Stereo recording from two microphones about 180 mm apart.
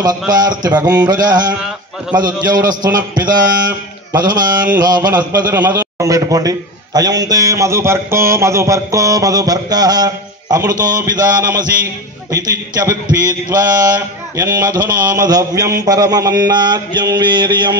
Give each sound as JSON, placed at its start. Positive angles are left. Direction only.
{"t": 0.8, "sound": "a man's voice", "side_deg": -20}
{"t": 2.6, "sound": "a man's voice", "side_deg": -25}